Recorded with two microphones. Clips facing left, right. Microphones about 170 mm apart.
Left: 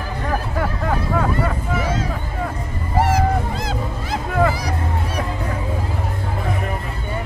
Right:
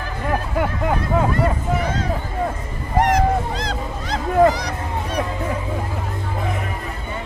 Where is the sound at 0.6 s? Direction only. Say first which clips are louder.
Right 2 dB; 15° right (ahead or behind).